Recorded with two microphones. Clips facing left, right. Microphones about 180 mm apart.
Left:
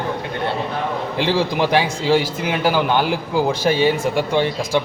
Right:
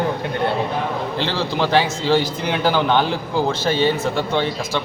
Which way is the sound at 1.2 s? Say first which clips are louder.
Left 4 dB; 10° left (ahead or behind).